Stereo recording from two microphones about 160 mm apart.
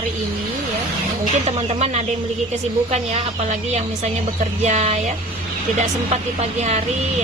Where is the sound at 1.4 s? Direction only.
40° right (ahead or behind).